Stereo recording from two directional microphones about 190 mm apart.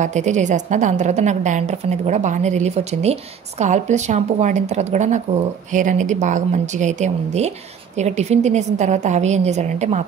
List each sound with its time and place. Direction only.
0.0 s a woman's voice: 40° right (ahead or behind)